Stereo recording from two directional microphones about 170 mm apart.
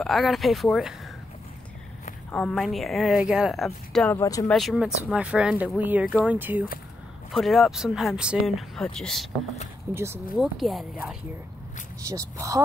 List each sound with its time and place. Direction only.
0.0 s speech: centre (ahead or behind)
2.3 s speech: 5° left (ahead or behind)
4.2 s speech: 20° left (ahead or behind)
4.5 s speech: centre (ahead or behind)
7.3 s speech: centre (ahead or behind)
9.9 s speech: 15° right (ahead or behind)
10.3 s speech: centre (ahead or behind)
12.1 s speech: 20° right (ahead or behind)